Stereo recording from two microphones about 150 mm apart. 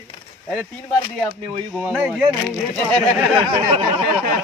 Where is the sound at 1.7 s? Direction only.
10° right (ahead or behind).